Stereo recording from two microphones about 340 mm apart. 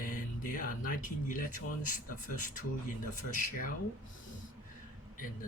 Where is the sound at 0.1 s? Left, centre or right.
Left.